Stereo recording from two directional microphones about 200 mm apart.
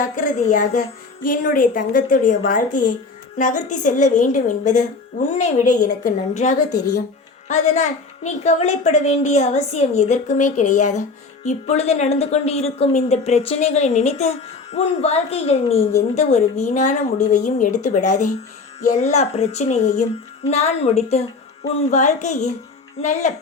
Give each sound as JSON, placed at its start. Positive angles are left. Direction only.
{"t": 0.2, "sound": "speech", "side_deg": 40}
{"t": 6.7, "sound": "speech", "side_deg": 20}
{"t": 7.4, "sound": "speech", "side_deg": 35}